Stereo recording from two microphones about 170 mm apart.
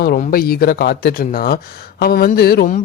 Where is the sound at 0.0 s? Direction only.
60° left (ahead or behind).